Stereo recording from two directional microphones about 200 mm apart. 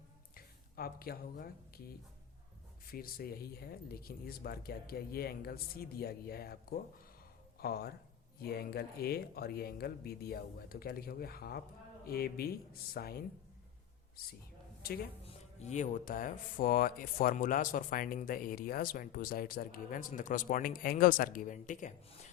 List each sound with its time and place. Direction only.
0.3 s speech: 50° left (ahead or behind)
2.9 s speech: 45° left (ahead or behind)
15.2 s speech: 30° left (ahead or behind)